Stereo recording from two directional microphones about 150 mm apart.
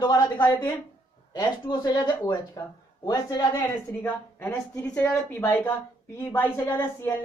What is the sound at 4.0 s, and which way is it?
A woman's voice, 15° left (ahead or behind).